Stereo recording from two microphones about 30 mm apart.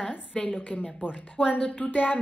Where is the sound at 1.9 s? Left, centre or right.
Left.